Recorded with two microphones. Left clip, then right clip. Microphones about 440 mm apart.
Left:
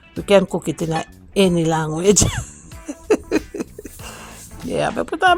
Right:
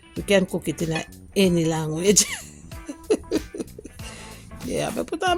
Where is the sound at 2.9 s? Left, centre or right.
Right.